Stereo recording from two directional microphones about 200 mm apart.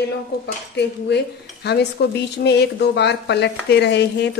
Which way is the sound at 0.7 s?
55° left (ahead or behind).